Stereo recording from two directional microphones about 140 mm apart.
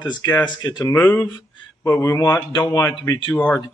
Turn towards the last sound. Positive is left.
turn(degrees=25)  # may be behind; listen again after turning